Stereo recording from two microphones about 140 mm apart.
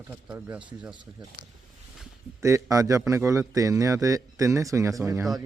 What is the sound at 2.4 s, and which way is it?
Speech, 20° right (ahead or behind).